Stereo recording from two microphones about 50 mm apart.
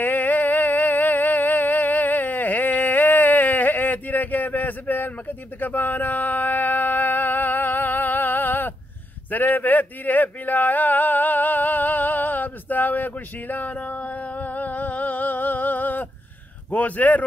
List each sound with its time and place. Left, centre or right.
0.0 s music: left
5.6 s a sound: left
16.7 s speech: left